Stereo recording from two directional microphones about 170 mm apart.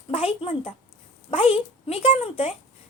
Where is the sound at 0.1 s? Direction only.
35° left (ahead or behind).